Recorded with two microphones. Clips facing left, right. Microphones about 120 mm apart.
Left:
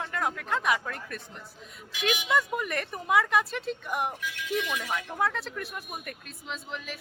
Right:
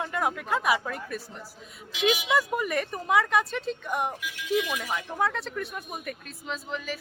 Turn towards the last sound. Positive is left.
turn(degrees=0)  # may be behind; listen again after turning